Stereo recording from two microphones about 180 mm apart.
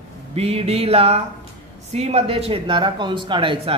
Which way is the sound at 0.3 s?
35° right (ahead or behind).